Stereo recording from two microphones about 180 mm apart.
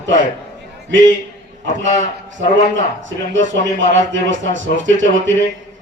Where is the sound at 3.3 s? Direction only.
90° right.